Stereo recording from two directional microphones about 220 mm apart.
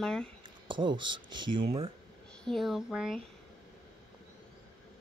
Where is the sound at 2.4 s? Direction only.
Centre (ahead or behind).